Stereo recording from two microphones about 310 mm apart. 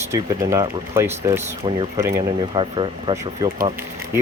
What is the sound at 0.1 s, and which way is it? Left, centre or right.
Speech, centre.